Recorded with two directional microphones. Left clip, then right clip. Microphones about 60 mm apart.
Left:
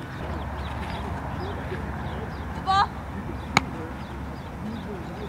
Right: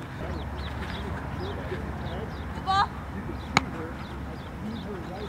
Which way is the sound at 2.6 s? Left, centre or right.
Centre.